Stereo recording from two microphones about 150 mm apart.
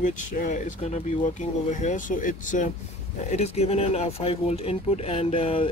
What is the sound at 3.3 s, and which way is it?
Speech, 45° left (ahead or behind).